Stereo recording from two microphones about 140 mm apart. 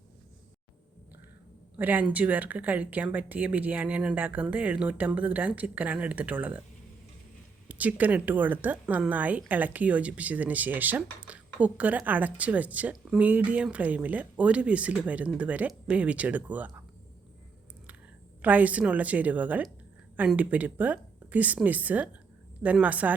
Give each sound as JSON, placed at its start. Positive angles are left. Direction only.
{"t": 1.7, "sound": "speech", "side_deg": -15}
{"t": 7.7, "sound": "speech", "side_deg": -10}
{"t": 18.4, "sound": "speech", "side_deg": -10}